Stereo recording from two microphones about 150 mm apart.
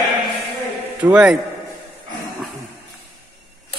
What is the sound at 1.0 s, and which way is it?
Speech, 10° right (ahead or behind).